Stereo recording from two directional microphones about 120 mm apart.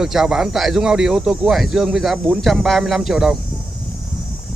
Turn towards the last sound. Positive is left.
turn(degrees=-5)  # may be behind; listen again after turning